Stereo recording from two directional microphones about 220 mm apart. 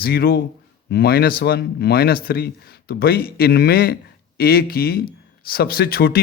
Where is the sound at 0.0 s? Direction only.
45° left (ahead or behind).